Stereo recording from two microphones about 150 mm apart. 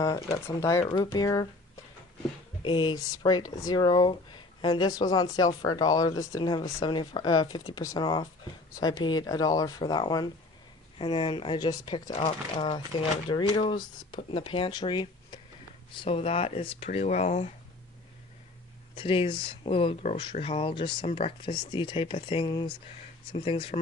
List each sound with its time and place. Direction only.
0.3 s speech: 20° left (ahead or behind)
0.8 s speech: 30° left (ahead or behind)
2.6 s speech: 30° left (ahead or behind); by 17.5 s 45° left (ahead or behind)
18.9 s speech: 35° left (ahead or behind)